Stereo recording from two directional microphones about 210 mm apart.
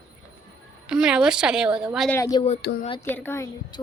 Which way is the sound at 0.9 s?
5° right (ahead or behind).